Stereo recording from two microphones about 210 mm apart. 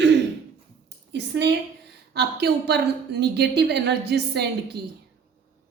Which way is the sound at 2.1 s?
50° right (ahead or behind).